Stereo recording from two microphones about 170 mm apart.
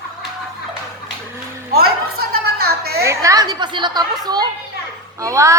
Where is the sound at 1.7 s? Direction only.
65° right (ahead or behind).